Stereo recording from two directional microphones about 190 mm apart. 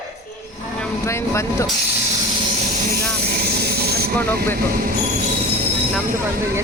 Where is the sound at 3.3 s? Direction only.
55° right (ahead or behind).